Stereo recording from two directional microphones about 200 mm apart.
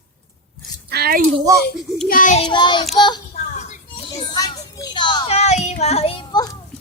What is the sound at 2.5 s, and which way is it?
Child singing, 20° left (ahead or behind).